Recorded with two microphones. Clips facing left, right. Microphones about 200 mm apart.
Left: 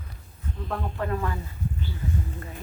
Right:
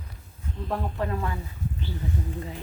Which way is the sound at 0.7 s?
10° right (ahead or behind).